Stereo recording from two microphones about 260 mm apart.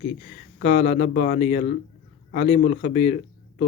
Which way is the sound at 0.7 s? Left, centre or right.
Left.